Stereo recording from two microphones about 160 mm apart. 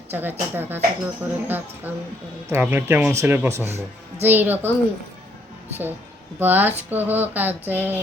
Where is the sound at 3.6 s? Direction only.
45° right (ahead or behind).